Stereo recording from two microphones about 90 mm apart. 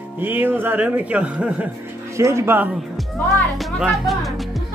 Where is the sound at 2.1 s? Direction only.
30° right (ahead or behind).